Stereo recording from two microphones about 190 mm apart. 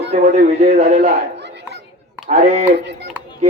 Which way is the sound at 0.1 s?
35° right (ahead or behind).